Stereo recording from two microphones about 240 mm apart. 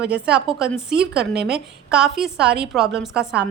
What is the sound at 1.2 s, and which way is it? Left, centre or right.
Speech, right.